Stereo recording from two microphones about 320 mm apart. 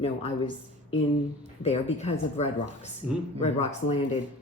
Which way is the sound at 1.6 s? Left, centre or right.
Left.